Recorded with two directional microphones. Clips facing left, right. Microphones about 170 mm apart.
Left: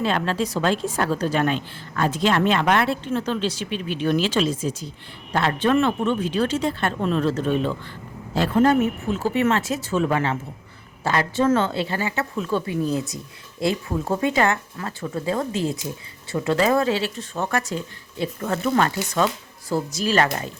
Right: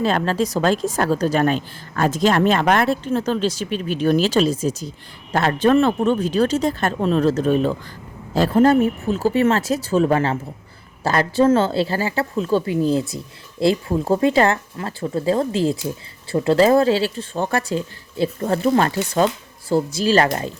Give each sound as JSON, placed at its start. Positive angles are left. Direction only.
{"t": 0.0, "sound": "a woman's voice", "side_deg": -40}